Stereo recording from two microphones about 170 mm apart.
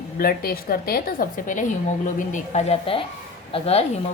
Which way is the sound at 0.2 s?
60° left (ahead or behind).